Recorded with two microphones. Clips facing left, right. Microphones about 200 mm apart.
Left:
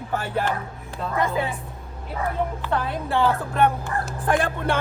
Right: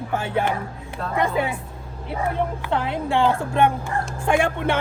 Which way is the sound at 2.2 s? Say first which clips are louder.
Right 2 dB; 15° right (ahead or behind).